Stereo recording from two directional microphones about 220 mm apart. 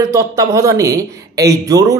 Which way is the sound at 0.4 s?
15° right (ahead or behind).